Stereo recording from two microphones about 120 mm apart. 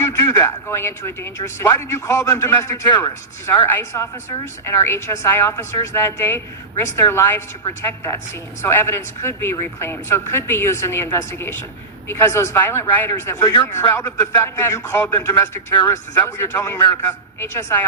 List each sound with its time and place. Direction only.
0.0 s speech: 25° left (ahead or behind)